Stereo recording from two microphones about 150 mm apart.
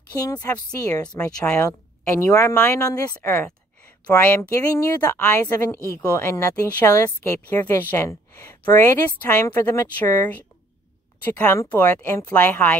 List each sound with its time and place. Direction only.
0.1 s a woman's voice: 25° left (ahead or behind)
11.3 s a woman's voice: 15° left (ahead or behind)